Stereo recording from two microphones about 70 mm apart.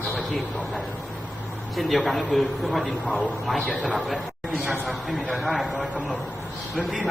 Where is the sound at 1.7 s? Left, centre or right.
Centre.